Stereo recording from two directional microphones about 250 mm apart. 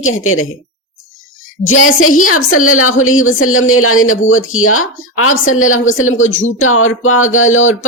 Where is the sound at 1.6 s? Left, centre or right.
Left.